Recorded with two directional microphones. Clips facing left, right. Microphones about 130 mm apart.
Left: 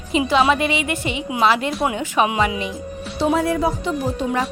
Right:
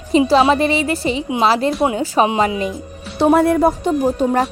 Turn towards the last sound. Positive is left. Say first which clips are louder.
# right 6 dB
turn(degrees=-45)  # may be behind; listen again after turning